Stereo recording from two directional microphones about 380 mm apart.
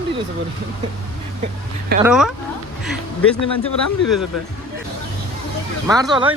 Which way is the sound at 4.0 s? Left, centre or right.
Left.